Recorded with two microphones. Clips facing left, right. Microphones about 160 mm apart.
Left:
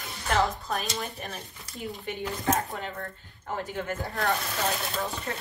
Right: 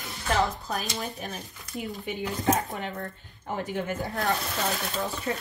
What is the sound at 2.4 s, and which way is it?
Speech, 20° right (ahead or behind).